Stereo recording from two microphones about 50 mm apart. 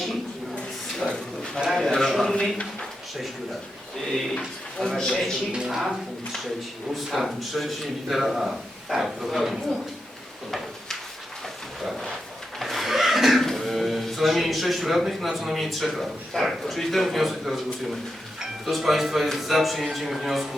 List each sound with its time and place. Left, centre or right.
1.0 s a sound: centre
1.7 s a man's voice: centre
2.3 s a man's voice: centre
3.9 s a man's voice: centre
5.1 s a man's voice: centre
5.5 s a man's voice: centre
11.8 s a sound: centre
18.6 s a man's voice: centre